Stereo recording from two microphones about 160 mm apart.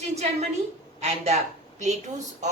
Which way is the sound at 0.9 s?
40° right (ahead or behind).